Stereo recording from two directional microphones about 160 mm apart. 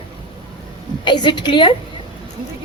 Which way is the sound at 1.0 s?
30° left (ahead or behind).